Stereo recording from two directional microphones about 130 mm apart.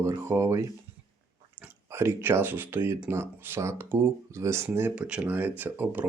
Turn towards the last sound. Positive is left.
turn(degrees=-15)  # may be behind; listen again after turning